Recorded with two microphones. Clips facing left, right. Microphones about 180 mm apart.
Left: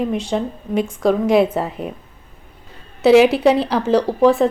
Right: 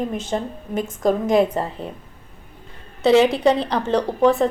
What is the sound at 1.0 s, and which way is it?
Speech, 40° right (ahead or behind).